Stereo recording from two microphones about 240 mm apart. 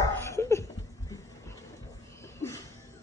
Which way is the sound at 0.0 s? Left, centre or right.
Centre.